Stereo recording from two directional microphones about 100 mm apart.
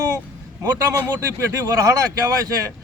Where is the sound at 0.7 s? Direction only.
25° right (ahead or behind).